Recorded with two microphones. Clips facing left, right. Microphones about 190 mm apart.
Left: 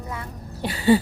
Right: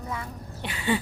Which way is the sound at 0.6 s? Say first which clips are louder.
Left 9 dB; 35° left (ahead or behind).